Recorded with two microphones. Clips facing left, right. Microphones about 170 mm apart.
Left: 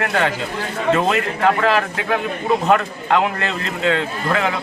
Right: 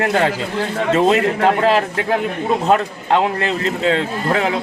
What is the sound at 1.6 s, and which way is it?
Speech, 30° right (ahead or behind).